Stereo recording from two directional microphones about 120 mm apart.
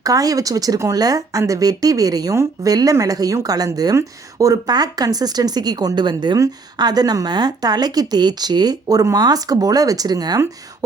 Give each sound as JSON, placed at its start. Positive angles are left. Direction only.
{"t": 0.0, "sound": "speech", "side_deg": -30}